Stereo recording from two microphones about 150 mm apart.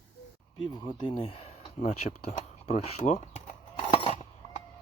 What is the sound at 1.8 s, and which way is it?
Speech, 50° left (ahead or behind).